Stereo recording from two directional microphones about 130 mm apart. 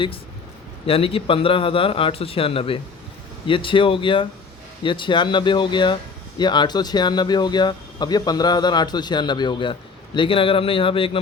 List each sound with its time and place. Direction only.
0.9 s speech: 45° left (ahead or behind)